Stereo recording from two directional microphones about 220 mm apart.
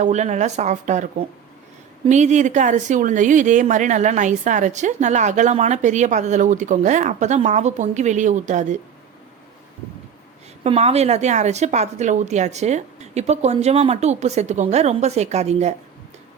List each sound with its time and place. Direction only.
0.0 s speech: 30° right (ahead or behind)
2.0 s speech: 30° right (ahead or behind)
10.6 s speech: 30° right (ahead or behind)